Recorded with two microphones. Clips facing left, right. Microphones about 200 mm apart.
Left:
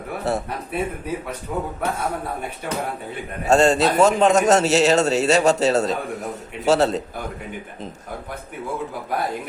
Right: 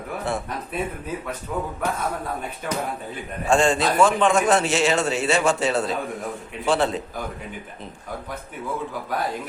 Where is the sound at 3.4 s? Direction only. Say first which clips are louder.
Left 3 dB; 40° left (ahead or behind).